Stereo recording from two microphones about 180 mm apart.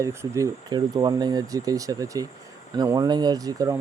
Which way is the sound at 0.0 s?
15° right (ahead or behind).